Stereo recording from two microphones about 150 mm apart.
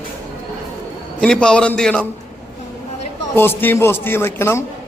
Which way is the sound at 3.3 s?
15° left (ahead or behind).